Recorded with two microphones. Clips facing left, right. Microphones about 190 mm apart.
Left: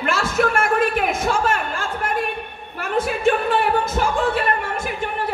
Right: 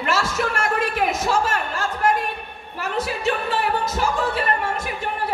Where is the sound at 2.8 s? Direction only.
50° left (ahead or behind).